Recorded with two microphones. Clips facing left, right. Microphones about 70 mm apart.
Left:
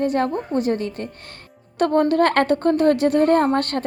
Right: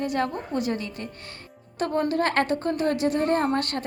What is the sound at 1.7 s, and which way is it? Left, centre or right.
A woman's voice, left.